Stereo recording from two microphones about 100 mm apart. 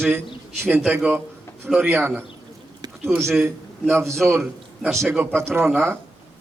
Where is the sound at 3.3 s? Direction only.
10° right (ahead or behind).